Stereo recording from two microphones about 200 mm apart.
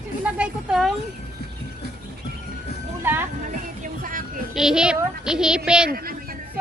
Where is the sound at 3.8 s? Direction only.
45° right (ahead or behind).